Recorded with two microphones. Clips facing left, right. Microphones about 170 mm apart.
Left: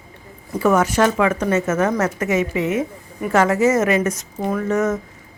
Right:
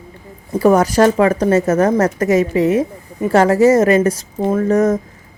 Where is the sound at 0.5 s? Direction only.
35° right (ahead or behind).